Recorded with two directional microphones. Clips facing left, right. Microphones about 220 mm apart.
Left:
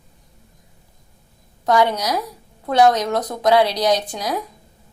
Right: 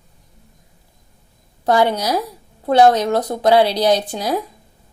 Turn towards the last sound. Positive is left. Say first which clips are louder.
# right 3 dB
turn(degrees=-30)  # may be behind; listen again after turning